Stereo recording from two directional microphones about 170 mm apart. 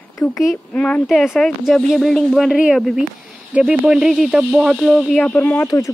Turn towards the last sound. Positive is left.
turn(degrees=20)  # may be behind; listen again after turning